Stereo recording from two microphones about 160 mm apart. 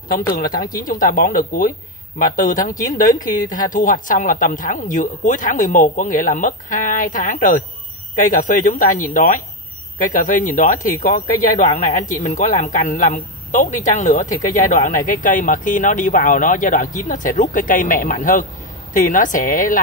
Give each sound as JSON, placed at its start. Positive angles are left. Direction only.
{"t": 0.4, "sound": "a woman's voice", "side_deg": 60}
{"t": 14.3, "sound": "speech", "side_deg": 20}
{"t": 14.7, "sound": "speech", "side_deg": 55}